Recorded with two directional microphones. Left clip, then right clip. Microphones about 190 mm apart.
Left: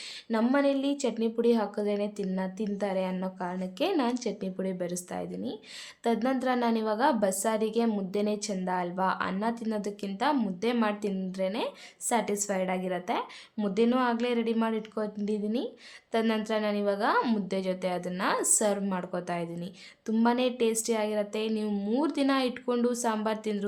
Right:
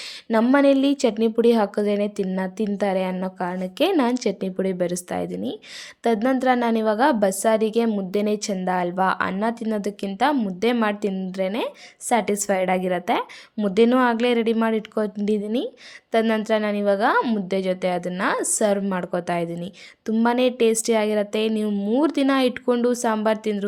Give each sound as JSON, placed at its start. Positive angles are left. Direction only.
{"t": 0.3, "sound": "a woman's voice", "side_deg": -40}
{"t": 17.2, "sound": "a woman's voice", "side_deg": -20}
{"t": 17.5, "sound": "a woman's voice", "side_deg": -30}
{"t": 21.7, "sound": "a woman's voice", "side_deg": -20}